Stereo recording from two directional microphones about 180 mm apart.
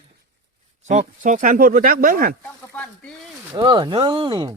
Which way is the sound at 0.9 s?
45° right (ahead or behind).